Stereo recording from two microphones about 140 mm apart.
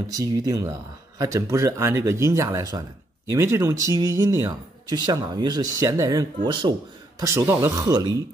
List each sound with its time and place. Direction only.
0.1 s speech: 25° right (ahead or behind)
7.2 s speech: 15° right (ahead or behind)